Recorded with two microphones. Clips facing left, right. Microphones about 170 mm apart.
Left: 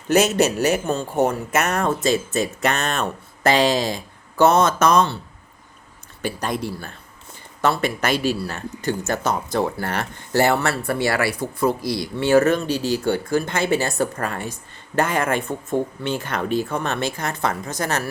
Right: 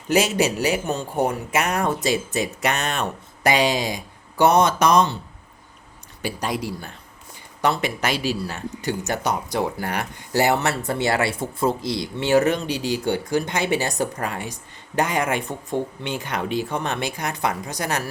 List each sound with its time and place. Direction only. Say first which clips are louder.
0.3 s speech: left 2 dB; 10° right (ahead or behind)
6.2 s speech: left 1 dB; 10° right (ahead or behind)
8.0 s speech: left 3 dB; 50° left (ahead or behind)
8.4 s speech: left 2 dB; 15° right (ahead or behind)